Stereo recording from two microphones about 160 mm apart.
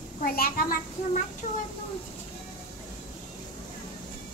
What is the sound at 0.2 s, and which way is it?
Speech, 65° left (ahead or behind).